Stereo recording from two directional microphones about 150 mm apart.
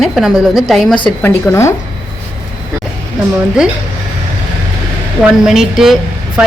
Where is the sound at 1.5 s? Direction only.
20° left (ahead or behind).